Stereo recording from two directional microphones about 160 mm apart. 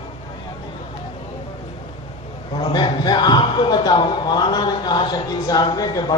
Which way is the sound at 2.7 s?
30° left (ahead or behind).